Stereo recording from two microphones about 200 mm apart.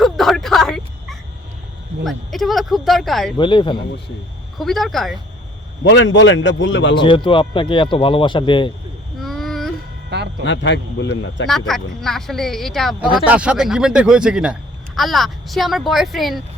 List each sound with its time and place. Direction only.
0.0 s a sound: centre (ahead or behind)
2.0 s speech: centre (ahead or behind)
3.3 s speech: 25° left (ahead or behind)
4.5 s speech: centre (ahead or behind)
5.8 s a man's voice: 65° left (ahead or behind)
6.9 s speech: 25° left (ahead or behind)
9.2 s a sound: centre (ahead or behind)
10.1 s music: 55° right (ahead or behind)
10.4 s a man's voice: 65° left (ahead or behind)
11.4 s speech: centre (ahead or behind)